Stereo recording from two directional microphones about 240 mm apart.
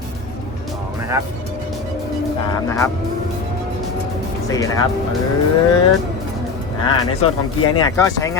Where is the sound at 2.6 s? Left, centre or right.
Centre.